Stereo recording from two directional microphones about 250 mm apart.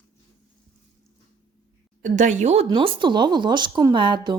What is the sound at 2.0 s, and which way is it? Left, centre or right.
Speech, right.